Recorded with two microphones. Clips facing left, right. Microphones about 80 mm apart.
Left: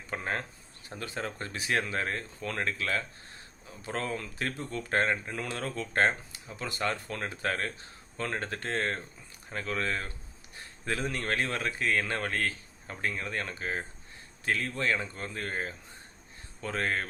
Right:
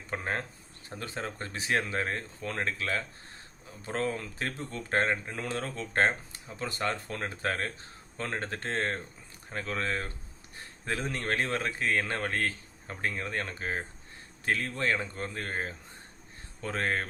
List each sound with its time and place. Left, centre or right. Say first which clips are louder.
0.1 s speech: even; right
11.1 s speech: right 1 dB; right